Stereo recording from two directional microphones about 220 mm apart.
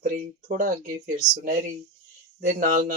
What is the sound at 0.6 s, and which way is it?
Speech, 40° right (ahead or behind).